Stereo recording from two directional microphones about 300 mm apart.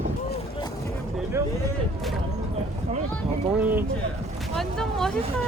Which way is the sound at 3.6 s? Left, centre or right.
Centre.